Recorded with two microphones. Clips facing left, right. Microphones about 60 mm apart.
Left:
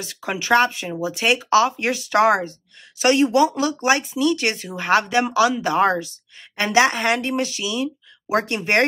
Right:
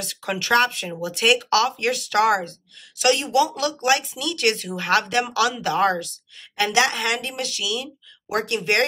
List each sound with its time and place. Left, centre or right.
0.0 s speech: centre; by 8.5 s left
8.5 s speech: centre